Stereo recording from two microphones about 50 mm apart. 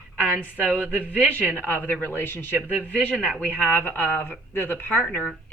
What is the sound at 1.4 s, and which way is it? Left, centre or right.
Speech, left.